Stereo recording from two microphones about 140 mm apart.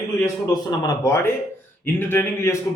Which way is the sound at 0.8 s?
25° left (ahead or behind).